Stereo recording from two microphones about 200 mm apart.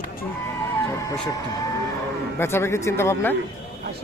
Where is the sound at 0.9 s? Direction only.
15° left (ahead or behind).